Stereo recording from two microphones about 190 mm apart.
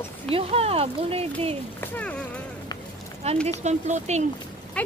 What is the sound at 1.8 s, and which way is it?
Speech, 5° left (ahead or behind).